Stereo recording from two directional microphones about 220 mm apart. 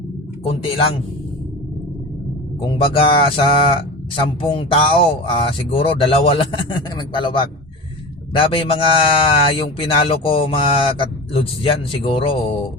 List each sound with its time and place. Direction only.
0.4 s speech: 25° left (ahead or behind)
2.7 s speech: 25° left (ahead or behind)